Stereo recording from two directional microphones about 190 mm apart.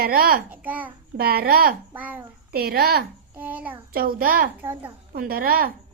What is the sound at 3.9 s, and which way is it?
Speech, 50° right (ahead or behind).